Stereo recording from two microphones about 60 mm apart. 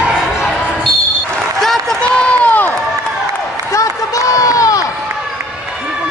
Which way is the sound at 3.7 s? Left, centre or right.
Left.